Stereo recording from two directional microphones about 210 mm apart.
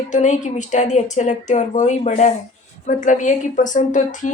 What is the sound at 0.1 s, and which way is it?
Speech, 35° left (ahead or behind).